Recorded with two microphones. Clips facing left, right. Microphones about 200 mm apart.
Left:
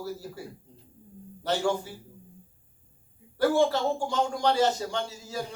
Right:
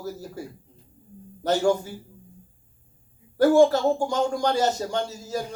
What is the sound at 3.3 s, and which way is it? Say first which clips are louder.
Speech: right 6 dB; 45° right (ahead or behind).